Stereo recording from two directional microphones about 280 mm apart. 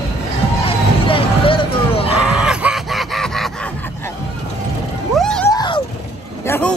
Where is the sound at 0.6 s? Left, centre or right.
Centre.